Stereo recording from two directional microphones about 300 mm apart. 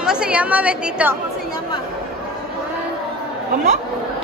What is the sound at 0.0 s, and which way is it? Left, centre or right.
A woman's voice, centre.